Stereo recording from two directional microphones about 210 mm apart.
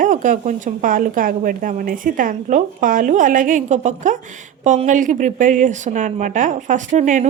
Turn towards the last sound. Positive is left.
turn(degrees=-35)  # may be behind; listen again after turning